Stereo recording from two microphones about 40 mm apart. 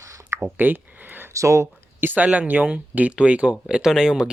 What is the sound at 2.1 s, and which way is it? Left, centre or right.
Speech, right.